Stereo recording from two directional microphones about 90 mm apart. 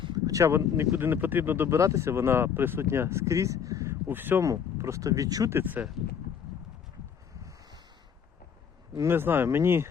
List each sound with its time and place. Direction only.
0.3 s speech: 35° right (ahead or behind)
4.0 s speech: 20° right (ahead or behind)
4.4 s speech: 35° right (ahead or behind)
5.5 s speech: 20° right (ahead or behind)
9.0 s speech: 25° right (ahead or behind)